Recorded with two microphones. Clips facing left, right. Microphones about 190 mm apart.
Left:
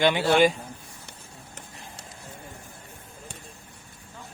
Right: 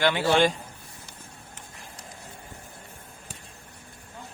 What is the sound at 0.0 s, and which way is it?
Speech, 15° left (ahead or behind).